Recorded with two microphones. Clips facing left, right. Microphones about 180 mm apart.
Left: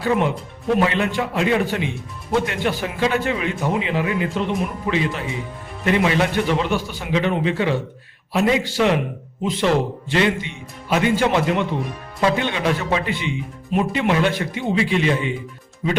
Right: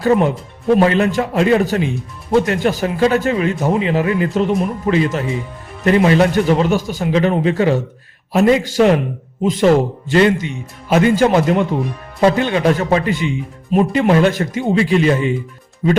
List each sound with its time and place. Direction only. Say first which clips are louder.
0.0 s a man's voice: right 6 dB; 45° right (ahead or behind)